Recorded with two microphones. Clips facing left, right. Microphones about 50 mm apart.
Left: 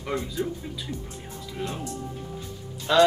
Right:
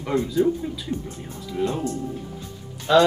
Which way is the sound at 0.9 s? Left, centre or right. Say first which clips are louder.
Right 7 dB; centre.